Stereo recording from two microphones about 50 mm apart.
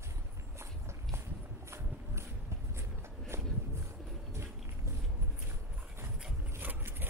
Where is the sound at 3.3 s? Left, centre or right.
Right.